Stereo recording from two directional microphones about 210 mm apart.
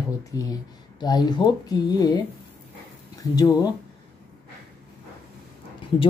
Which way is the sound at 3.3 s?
15° left (ahead or behind).